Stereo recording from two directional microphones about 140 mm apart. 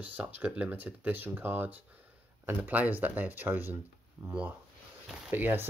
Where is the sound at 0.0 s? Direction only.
10° right (ahead or behind).